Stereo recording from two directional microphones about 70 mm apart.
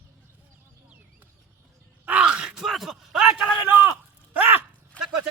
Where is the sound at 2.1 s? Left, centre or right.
Centre.